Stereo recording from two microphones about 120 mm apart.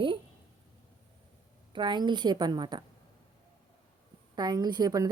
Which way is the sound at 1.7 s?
40° right (ahead or behind).